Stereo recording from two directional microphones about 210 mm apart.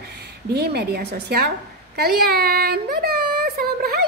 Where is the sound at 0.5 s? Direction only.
50° right (ahead or behind).